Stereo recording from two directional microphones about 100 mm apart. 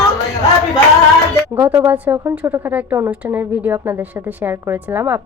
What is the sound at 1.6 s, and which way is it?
A woman's voice, 20° right (ahead or behind).